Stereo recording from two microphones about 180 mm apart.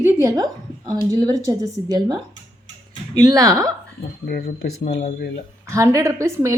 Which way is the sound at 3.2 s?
20° right (ahead or behind).